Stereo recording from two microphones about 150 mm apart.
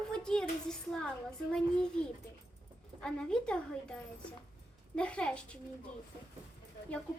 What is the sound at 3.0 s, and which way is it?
A woman's voice, 5° left (ahead or behind).